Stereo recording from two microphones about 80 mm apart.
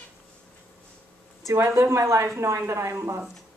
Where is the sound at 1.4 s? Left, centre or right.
Right.